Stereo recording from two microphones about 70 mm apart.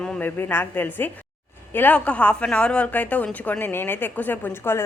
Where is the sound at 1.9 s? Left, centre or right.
Centre.